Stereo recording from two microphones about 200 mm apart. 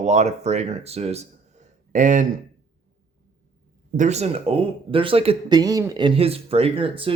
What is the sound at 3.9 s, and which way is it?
Speech, 35° right (ahead or behind).